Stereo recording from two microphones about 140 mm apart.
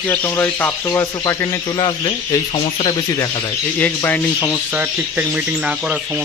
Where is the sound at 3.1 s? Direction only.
25° left (ahead or behind).